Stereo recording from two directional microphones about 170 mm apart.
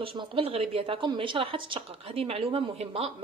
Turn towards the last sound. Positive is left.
turn(degrees=-35)  # may be behind; listen again after turning